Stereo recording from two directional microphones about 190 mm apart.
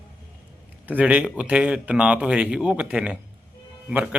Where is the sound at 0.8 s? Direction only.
5° right (ahead or behind).